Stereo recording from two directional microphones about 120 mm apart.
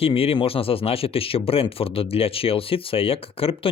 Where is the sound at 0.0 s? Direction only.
55° left (ahead or behind).